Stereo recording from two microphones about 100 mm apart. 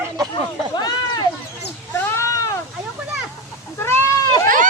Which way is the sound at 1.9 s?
25° left (ahead or behind).